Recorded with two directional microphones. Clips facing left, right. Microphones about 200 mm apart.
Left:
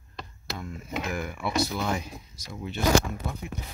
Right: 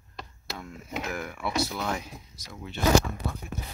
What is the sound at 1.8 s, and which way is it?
Speech, 5° left (ahead or behind).